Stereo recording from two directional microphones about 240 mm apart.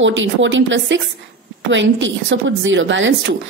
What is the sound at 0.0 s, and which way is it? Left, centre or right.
A woman's voice, right.